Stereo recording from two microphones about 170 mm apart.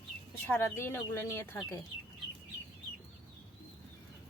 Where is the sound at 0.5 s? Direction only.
15° left (ahead or behind).